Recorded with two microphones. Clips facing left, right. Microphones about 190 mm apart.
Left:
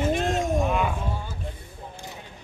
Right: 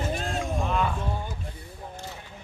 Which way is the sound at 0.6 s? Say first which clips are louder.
Left 2 dB; 10° left (ahead or behind).